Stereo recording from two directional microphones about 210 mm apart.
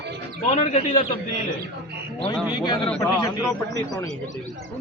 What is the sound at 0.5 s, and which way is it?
Speech, 30° left (ahead or behind).